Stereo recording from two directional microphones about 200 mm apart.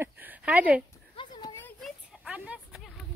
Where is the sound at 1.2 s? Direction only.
20° left (ahead or behind).